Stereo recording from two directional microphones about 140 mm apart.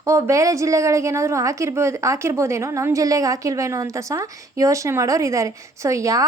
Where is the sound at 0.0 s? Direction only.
20° right (ahead or behind).